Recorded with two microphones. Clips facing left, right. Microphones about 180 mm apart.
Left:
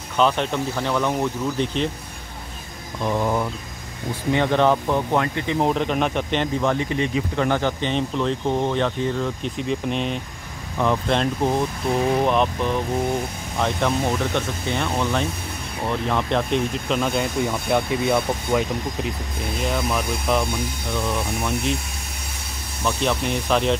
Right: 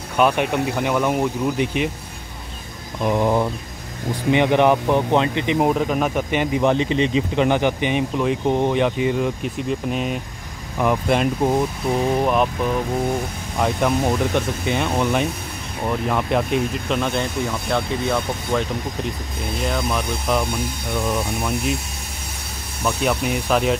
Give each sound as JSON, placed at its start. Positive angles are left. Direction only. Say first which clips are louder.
{"t": 0.2, "sound": "speech", "louder": "right 2 dB", "side_deg": -10}
{"t": 3.0, "sound": "speech", "louder": "right 4 dB", "side_deg": -15}
{"t": 5.7, "sound": "speech", "louder": "right 2 dB", "side_deg": -5}
{"t": 13.6, "sound": "speech", "louder": "right 2 dB", "side_deg": -10}
{"t": 17.5, "sound": "speech", "louder": "left 1 dB", "side_deg": 15}
{"t": 22.8, "sound": "speech", "louder": "right 2 dB", "side_deg": -5}